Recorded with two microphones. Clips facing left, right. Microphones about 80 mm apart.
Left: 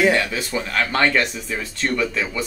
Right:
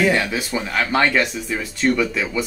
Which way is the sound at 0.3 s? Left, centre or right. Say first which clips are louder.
Right 1 dB; centre.